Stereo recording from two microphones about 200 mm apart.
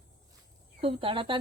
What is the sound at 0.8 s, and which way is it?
Speech, 25° right (ahead or behind).